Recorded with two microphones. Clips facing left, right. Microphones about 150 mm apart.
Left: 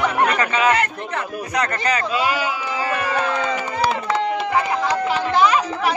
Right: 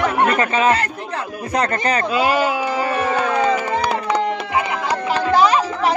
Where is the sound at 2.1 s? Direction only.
50° right (ahead or behind).